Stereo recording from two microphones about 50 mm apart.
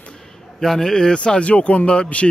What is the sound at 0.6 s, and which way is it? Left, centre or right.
Speech, centre.